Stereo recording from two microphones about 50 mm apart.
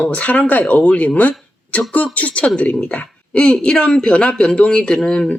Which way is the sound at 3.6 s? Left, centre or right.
Centre.